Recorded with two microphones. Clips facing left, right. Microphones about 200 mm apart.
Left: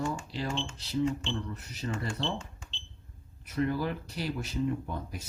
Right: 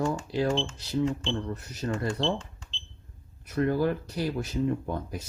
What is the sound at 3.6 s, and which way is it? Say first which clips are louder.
Speech: right 5 dB; 45° right (ahead or behind).